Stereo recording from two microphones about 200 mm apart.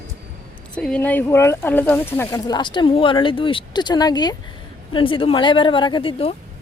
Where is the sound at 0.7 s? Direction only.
5° left (ahead or behind); by 6.4 s 25° left (ahead or behind).